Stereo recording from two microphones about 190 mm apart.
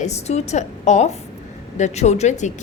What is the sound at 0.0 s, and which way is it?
A woman's voice, 35° left (ahead or behind).